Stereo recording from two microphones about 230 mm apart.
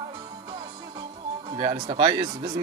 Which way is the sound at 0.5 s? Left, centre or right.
Centre.